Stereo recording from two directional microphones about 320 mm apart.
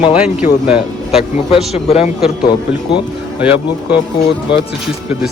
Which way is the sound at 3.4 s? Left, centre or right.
Centre.